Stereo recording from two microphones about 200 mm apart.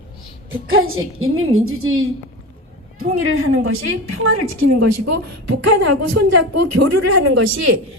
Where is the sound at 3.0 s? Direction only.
90° right.